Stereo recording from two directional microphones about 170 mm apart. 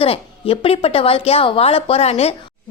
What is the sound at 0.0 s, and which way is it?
Speech, 35° left (ahead or behind).